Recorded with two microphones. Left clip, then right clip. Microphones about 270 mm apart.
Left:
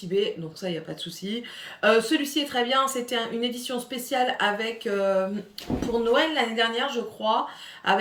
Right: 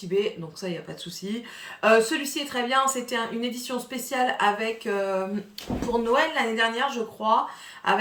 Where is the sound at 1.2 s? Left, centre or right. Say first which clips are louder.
Left 1 dB; centre.